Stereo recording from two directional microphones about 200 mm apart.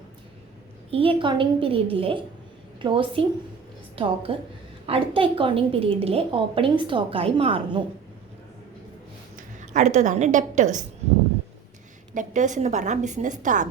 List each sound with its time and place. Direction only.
0.9 s a woman's voice: 25° right (ahead or behind)
9.3 s a woman's voice: 35° right (ahead or behind)
12.1 s a woman's voice: 40° right (ahead or behind)